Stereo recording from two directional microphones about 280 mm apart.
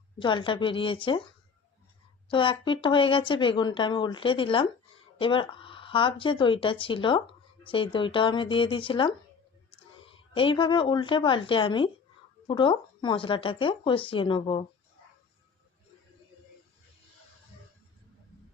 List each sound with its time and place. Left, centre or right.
0.2 s speech: centre
2.3 s speech: centre
10.3 s speech: centre